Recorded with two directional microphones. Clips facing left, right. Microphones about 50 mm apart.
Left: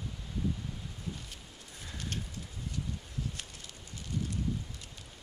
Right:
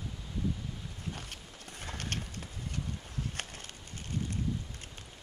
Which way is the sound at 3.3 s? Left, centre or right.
Right.